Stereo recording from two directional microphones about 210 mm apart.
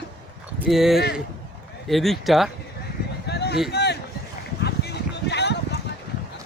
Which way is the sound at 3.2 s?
50° left (ahead or behind).